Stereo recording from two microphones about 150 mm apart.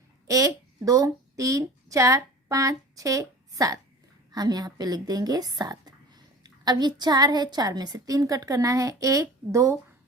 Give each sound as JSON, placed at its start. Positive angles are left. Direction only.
{"t": 0.3, "sound": "a child's voice", "side_deg": -20}